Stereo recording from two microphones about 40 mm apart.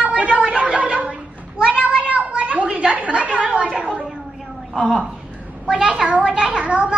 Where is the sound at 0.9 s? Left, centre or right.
Right.